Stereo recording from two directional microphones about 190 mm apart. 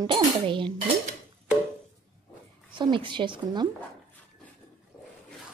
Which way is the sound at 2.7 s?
25° right (ahead or behind).